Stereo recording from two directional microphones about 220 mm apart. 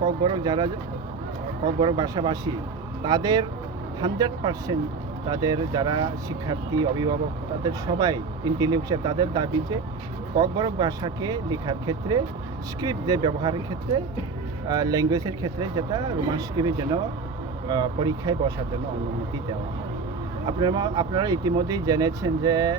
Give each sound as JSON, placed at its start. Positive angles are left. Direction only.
{"t": 0.0, "sound": "speech", "side_deg": -20}
{"t": 1.8, "sound": "speech", "side_deg": -20}
{"t": 20.5, "sound": "speech", "side_deg": -20}